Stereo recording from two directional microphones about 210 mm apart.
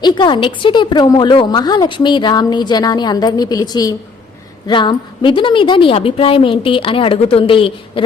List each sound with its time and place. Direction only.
0.0 s a woman's voice: 20° left (ahead or behind)